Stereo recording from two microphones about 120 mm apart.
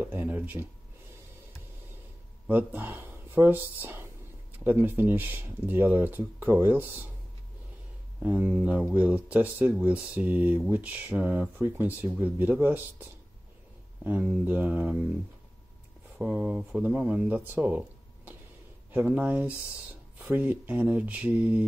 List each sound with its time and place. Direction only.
0.0 s speech: 15° right (ahead or behind)
2.4 s speech: 15° right (ahead or behind)
8.2 s speech: 10° right (ahead or behind)
16.2 s speech: 15° right (ahead or behind)